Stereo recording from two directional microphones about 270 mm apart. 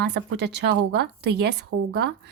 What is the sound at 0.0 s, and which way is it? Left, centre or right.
A woman's voice, right.